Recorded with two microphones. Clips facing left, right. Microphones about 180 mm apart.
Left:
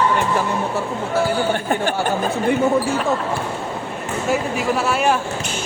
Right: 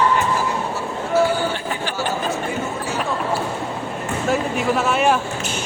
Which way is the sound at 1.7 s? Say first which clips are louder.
Left 4 dB; 50° left (ahead or behind).